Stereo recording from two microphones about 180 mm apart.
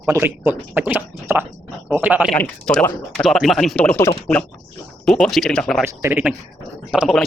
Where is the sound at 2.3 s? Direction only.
10° left (ahead or behind).